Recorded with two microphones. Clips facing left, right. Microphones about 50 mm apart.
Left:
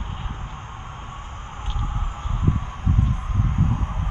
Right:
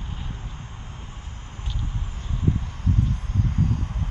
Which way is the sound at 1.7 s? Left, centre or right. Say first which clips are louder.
Left 4 dB; left.